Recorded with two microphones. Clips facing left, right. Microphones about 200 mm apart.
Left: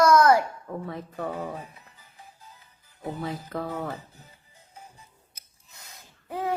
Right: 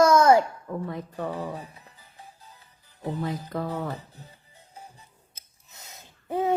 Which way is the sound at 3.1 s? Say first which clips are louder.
Right 2 dB; centre (ahead or behind).